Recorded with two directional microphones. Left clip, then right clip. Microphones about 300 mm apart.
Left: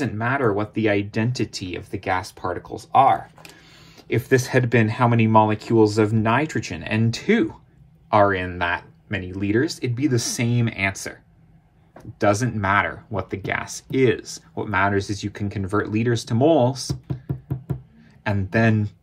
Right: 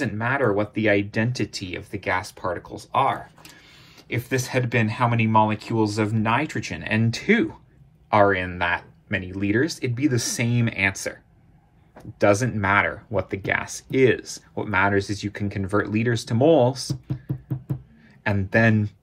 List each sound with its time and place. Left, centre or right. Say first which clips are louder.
0.0 s speech: left 1 dB; centre
4.1 s speech: left 6 dB; left
18.2 s speech: right 1 dB; centre